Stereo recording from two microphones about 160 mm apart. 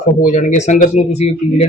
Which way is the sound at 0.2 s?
50° left (ahead or behind).